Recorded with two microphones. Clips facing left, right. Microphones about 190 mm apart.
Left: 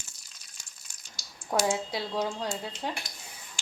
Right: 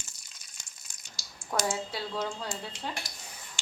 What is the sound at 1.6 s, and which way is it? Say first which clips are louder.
Speech: left 3 dB; 15° left (ahead or behind).